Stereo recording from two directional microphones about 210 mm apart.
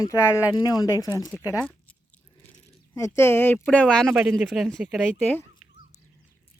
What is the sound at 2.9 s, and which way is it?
Speech, 15° left (ahead or behind).